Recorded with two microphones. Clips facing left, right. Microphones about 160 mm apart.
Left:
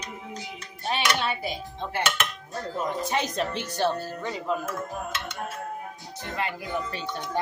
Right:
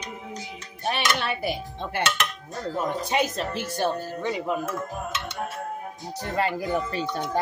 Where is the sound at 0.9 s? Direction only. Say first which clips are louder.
Even; 65° right (ahead or behind).